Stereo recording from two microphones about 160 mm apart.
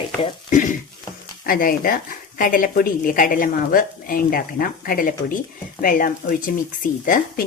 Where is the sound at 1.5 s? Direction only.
60° left (ahead or behind).